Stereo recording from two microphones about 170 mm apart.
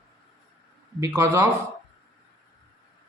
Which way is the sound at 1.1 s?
15° right (ahead or behind).